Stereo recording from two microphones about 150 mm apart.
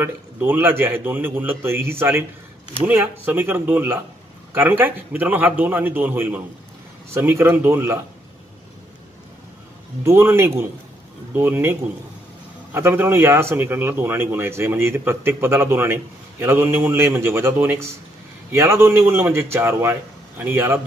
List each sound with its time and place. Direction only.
0.0 s a man's voice: 15° right (ahead or behind)
10.0 s a man's voice: 15° right (ahead or behind)